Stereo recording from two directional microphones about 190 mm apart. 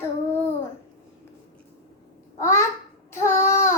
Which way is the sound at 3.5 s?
15° left (ahead or behind).